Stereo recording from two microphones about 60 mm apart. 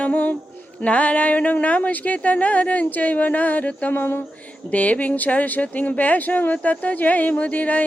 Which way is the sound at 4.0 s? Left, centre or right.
Left.